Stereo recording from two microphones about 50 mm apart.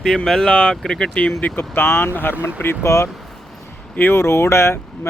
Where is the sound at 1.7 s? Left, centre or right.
Left.